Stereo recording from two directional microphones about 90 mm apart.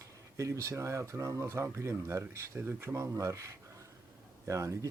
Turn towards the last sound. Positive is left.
turn(degrees=-35)  # may be behind; listen again after turning